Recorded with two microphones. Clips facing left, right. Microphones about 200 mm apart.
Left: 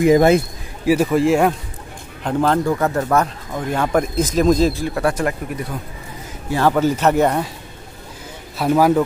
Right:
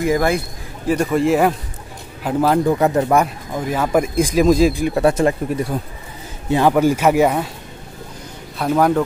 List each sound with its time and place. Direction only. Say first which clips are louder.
0.0 s speech: left 5 dB; 20° left (ahead or behind)
0.8 s a man's voice: left 1 dB; 5° left (ahead or behind)
2.6 s speech: right 3 dB; 15° right (ahead or behind)
6.7 s speech: even; 10° right (ahead or behind)
8.5 s a man's voice: left 1 dB; 5° left (ahead or behind)